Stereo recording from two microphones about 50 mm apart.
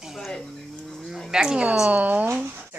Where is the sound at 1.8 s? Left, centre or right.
Right.